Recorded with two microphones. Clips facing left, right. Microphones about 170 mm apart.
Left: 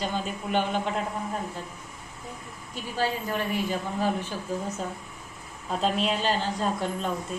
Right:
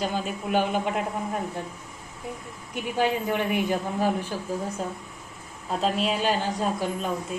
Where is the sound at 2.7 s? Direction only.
20° right (ahead or behind).